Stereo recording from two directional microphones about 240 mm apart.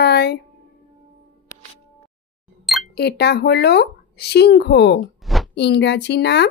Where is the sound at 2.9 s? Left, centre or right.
Left.